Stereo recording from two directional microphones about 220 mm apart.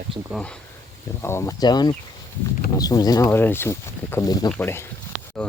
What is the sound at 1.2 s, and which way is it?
Speech, 10° left (ahead or behind).